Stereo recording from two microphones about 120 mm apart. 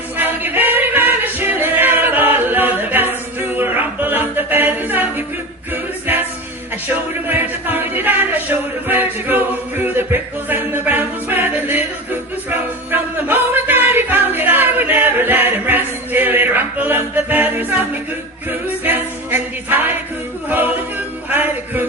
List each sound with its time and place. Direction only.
0.2 s singing: 15° right (ahead or behind)
5.7 s music: 15° right (ahead or behind)
6.9 s a sound: 15° right (ahead or behind)
12.5 s music: 15° right (ahead or behind)
18.9 s music: 15° right (ahead or behind)
21.2 s music: 15° right (ahead or behind)